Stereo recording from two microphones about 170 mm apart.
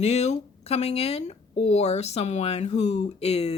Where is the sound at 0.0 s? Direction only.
40° left (ahead or behind).